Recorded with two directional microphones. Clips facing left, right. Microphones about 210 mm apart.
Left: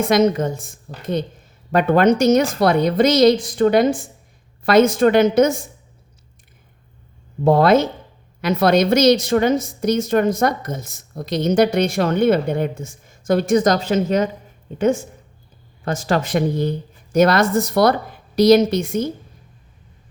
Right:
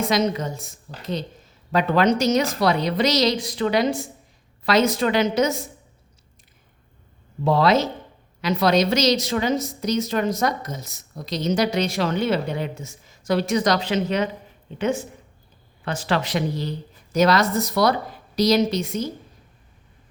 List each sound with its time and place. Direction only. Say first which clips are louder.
0.0 s a woman's voice: left 6 dB; 50° left (ahead or behind)
7.4 s a woman's voice: left 5 dB; 50° left (ahead or behind)
15.8 s a woman's voice: left 4 dB; 45° left (ahead or behind)